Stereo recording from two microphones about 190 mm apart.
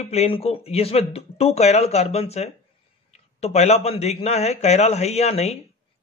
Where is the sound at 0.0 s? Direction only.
35° left (ahead or behind).